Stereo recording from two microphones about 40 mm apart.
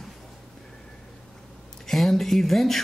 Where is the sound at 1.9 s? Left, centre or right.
Centre.